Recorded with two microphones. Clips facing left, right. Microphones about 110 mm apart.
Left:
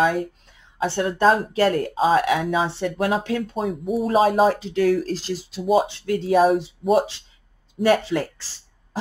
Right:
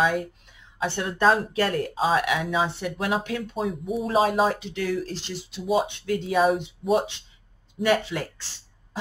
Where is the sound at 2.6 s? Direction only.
30° left (ahead or behind).